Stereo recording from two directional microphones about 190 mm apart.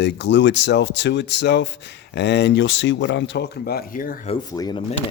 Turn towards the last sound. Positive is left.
turn(degrees=20)  # may be behind; listen again after turning